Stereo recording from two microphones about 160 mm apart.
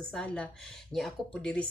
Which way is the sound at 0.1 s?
5° left (ahead or behind).